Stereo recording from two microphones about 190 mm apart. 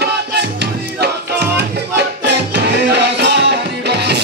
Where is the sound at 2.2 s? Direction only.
60° right (ahead or behind).